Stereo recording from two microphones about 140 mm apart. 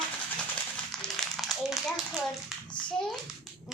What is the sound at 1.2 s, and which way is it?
Speech, centre (ahead or behind).